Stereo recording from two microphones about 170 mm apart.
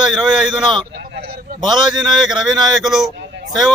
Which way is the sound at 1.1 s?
65° right (ahead or behind).